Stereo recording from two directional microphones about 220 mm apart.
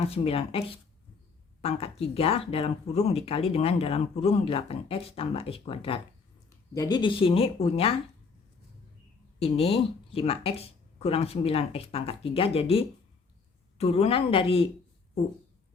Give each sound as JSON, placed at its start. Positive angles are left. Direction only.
{"t": 0.1, "sound": "speech", "side_deg": 25}
{"t": 9.4, "sound": "speech", "side_deg": 25}